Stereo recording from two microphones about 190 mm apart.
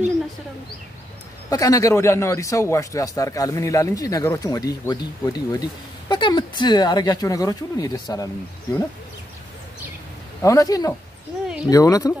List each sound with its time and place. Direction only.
1.5 s speech: 15° left (ahead or behind)
10.4 s speech: 15° left (ahead or behind)
11.4 s speech: 5° right (ahead or behind)
11.7 s speech: 20° left (ahead or behind)